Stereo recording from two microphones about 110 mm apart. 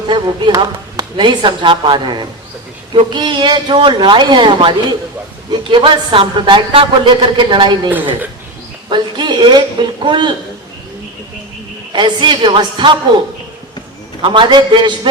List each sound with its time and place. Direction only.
0.1 s speech: 45° right (ahead or behind)
8.9 s speech: 45° right (ahead or behind)
11.9 s speech: 45° right (ahead or behind)